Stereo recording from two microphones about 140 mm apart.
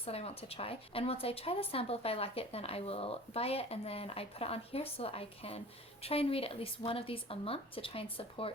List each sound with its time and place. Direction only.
0.0 s speech: 45° left (ahead or behind)